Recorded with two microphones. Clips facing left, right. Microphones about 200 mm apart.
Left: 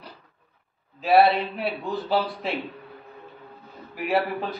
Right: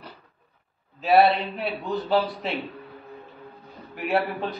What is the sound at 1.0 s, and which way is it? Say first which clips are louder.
A man's voice: even; centre (ahead or behind).